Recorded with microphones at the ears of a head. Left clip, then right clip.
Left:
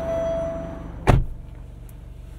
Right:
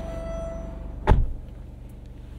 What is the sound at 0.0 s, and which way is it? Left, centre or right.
Vehicle, left.